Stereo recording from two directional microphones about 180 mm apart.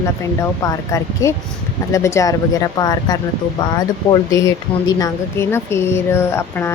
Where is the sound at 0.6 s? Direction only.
15° left (ahead or behind).